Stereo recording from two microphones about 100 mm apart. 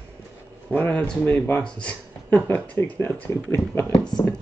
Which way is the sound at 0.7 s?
15° left (ahead or behind).